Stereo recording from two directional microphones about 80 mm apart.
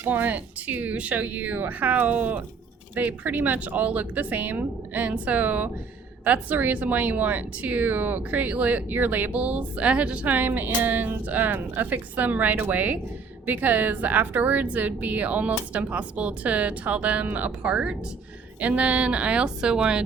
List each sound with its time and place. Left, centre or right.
0.0 s speech: right